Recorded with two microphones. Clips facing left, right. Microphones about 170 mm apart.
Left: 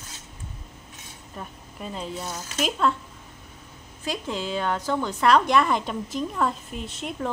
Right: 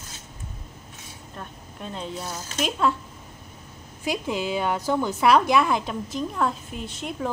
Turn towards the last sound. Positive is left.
turn(degrees=0)  # may be behind; listen again after turning